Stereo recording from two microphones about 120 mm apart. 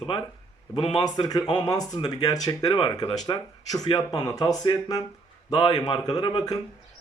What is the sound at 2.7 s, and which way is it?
Speech, 45° left (ahead or behind).